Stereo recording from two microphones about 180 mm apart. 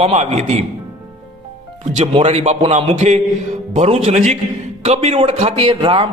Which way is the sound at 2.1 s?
35° right (ahead or behind).